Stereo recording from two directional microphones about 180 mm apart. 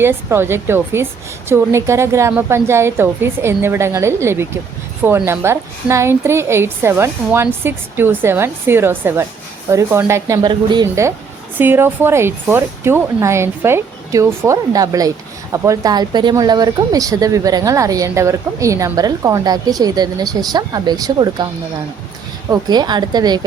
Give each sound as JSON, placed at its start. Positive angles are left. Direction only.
{"t": 0.0, "sound": "a woman's voice", "side_deg": -15}
{"t": 22.4, "sound": "speech", "side_deg": -20}